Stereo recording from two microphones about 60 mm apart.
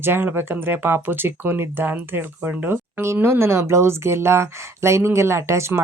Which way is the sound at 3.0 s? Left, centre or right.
Right.